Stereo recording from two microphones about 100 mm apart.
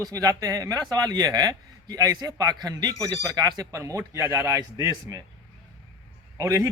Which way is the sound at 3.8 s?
30° right (ahead or behind).